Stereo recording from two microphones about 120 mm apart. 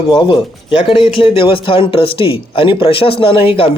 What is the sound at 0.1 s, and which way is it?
A man's voice, 45° left (ahead or behind).